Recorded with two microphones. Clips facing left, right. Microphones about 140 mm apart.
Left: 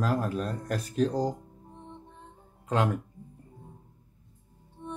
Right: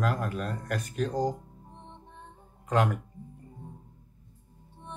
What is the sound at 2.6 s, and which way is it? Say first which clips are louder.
Speech: right 1 dB; 30° left (ahead or behind).